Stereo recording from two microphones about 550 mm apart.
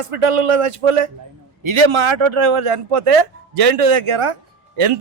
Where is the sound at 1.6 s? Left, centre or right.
Right.